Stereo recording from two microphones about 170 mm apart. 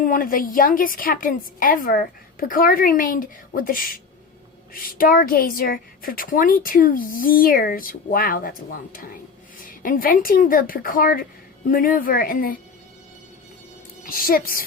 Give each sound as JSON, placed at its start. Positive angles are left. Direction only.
{"t": 0.0, "sound": "a woman's voice", "side_deg": 55}
{"t": 14.0, "sound": "a woman's voice", "side_deg": 60}